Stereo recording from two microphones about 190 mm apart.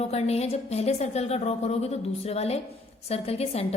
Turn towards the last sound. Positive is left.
turn(degrees=35)  # may be behind; listen again after turning